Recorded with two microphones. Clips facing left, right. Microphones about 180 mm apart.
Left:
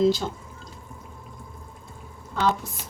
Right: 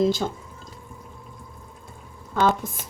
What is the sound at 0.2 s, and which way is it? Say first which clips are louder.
Speech: right 3 dB; 55° right (ahead or behind).